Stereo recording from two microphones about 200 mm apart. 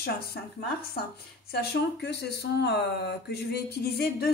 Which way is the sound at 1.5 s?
55° left (ahead or behind).